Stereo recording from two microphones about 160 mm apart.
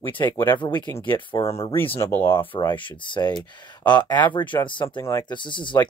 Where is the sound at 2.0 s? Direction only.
15° left (ahead or behind).